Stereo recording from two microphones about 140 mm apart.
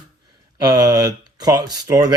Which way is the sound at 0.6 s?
25° right (ahead or behind).